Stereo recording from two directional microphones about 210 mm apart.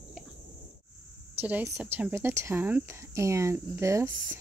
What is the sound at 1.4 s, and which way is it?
Speech, 10° right (ahead or behind).